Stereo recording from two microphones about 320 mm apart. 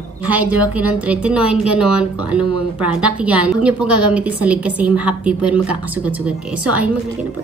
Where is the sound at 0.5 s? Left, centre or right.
Centre.